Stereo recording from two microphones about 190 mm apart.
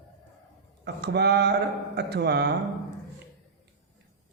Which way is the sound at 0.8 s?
60° right (ahead or behind).